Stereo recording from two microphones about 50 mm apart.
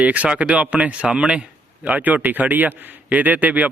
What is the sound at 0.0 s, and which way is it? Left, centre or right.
Speech, right.